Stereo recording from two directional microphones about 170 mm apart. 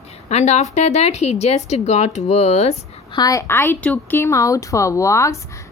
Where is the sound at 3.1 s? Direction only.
20° left (ahead or behind).